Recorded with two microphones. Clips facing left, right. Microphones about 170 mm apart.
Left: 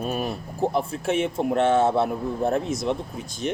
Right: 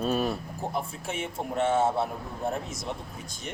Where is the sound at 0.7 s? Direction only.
75° left (ahead or behind).